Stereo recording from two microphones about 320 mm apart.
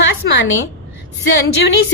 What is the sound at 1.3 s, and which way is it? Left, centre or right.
Speech, left.